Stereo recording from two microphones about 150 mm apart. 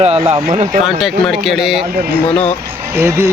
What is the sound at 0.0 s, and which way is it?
Speech, 45° right (ahead or behind).